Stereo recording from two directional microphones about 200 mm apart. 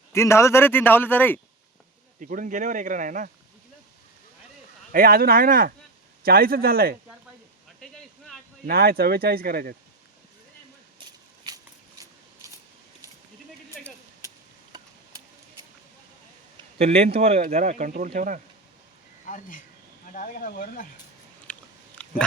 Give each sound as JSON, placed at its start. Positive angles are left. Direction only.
{"t": 0.1, "sound": "speech", "side_deg": 15}
{"t": 2.1, "sound": "speech", "side_deg": -40}
{"t": 4.9, "sound": "speech", "side_deg": -45}
{"t": 7.8, "sound": "a sound", "side_deg": 0}
{"t": 8.6, "sound": "speech", "side_deg": -50}
{"t": 11.0, "sound": "a sound", "side_deg": -25}
{"t": 13.8, "sound": "a sound", "side_deg": 5}
{"t": 16.7, "sound": "speech", "side_deg": -30}
{"t": 19.2, "sound": "speech", "side_deg": 40}
{"t": 21.5, "sound": "biting", "side_deg": 5}
{"t": 22.0, "sound": "chewing", "side_deg": 5}